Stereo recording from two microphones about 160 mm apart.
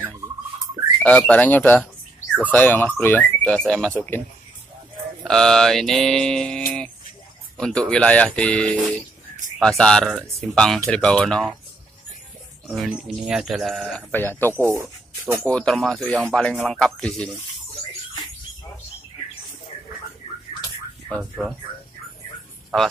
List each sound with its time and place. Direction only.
1.0 s speech: 10° left (ahead or behind)
5.2 s speech: 5° left (ahead or behind)
12.6 s speech: centre (ahead or behind)
14.6 s speech: 15° right (ahead or behind)
15.4 s speech: 5° left (ahead or behind)
21.2 s speech: 5° right (ahead or behind)